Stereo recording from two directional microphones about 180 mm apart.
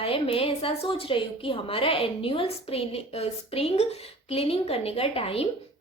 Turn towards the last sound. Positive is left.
turn(degrees=30)  # may be behind; listen again after turning